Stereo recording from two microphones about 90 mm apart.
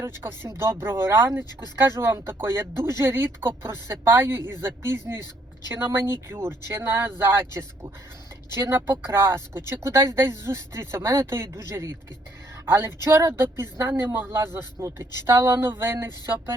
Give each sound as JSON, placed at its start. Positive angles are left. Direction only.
{"t": 0.2, "sound": "speech", "side_deg": -25}